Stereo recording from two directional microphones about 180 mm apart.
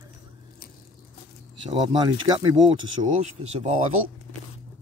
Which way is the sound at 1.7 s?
25° right (ahead or behind).